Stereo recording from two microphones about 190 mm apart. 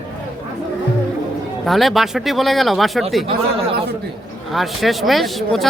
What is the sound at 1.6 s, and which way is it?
Speech, centre (ahead or behind).